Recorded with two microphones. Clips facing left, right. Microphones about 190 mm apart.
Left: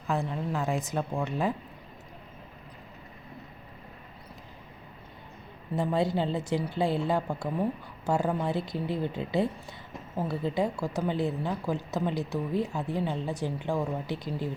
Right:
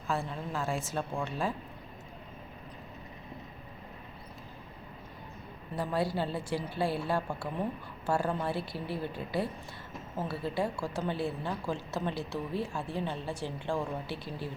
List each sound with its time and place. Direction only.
0.1 s speech: 15° left (ahead or behind)
5.7 s a woman's voice: 20° left (ahead or behind)